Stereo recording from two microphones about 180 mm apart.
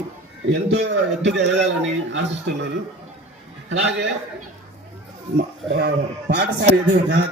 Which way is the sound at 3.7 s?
75° right (ahead or behind).